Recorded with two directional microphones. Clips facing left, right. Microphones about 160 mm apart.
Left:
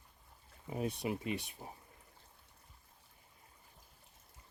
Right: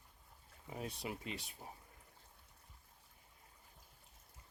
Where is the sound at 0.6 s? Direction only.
20° left (ahead or behind).